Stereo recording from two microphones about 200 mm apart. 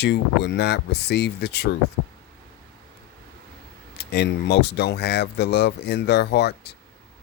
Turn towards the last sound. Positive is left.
turn(degrees=55)  # may be behind; listen again after turning